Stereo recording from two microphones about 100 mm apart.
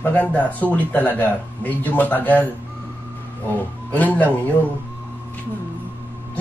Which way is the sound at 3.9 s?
15° left (ahead or behind).